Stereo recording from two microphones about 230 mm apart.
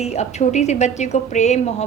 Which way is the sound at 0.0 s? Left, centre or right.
Left.